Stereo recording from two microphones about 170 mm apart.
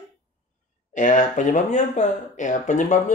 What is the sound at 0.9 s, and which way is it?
Speech, 50° left (ahead or behind).